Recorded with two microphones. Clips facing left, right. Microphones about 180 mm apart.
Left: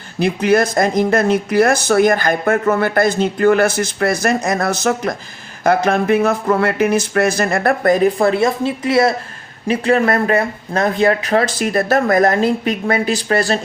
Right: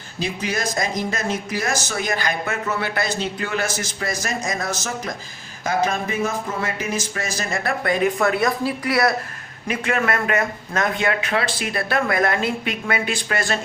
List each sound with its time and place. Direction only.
0.2 s speech: 60° left (ahead or behind)
7.9 s speech: 35° left (ahead or behind)